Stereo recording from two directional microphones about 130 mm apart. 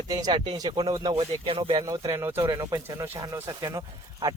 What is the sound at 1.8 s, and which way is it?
Speech, 25° right (ahead or behind).